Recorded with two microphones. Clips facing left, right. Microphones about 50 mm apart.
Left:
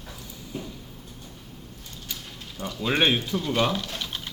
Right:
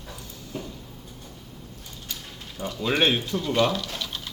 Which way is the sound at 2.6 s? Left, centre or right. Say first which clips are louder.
Right 2 dB; centre.